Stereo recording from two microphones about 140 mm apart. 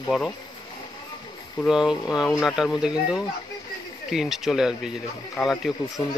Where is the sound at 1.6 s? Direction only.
5° right (ahead or behind).